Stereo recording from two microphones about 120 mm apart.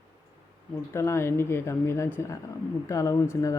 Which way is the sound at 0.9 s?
20° left (ahead or behind).